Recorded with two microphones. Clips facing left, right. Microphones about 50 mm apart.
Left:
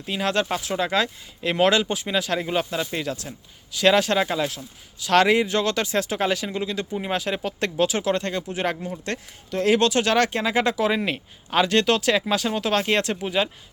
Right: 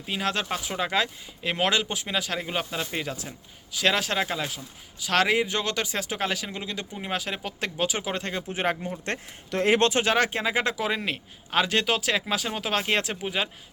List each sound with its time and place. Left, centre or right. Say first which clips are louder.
0.0 s speech: left 4 dB; centre
9.6 s speech: left 2 dB; right
10.0 s speech: left 3 dB; centre